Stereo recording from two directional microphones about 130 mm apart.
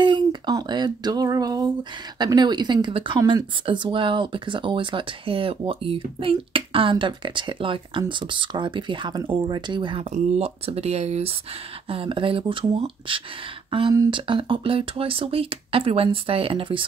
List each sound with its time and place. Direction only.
0.0 s speech: 35° right (ahead or behind)
10.1 s speech: 55° right (ahead or behind)
11.9 s speech: 45° right (ahead or behind)